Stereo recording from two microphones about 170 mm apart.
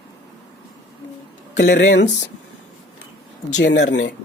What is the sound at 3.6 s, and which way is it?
Speech, 90° left.